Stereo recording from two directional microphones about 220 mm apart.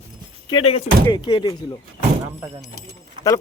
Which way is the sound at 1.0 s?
20° left (ahead or behind).